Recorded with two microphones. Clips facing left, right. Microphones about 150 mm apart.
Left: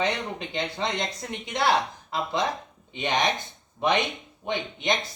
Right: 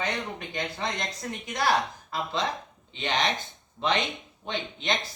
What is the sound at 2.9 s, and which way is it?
Speech, 15° left (ahead or behind).